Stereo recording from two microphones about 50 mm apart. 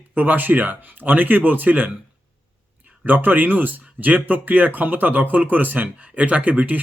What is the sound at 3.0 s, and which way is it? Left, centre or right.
Speech, right.